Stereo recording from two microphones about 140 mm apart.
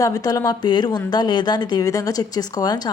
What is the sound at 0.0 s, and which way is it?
A woman's voice, 25° left (ahead or behind).